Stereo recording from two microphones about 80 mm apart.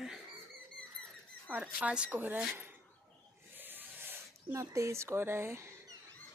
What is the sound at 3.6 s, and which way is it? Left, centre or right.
Rub, right.